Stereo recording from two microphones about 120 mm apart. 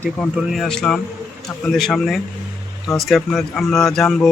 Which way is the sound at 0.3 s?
Centre (ahead or behind).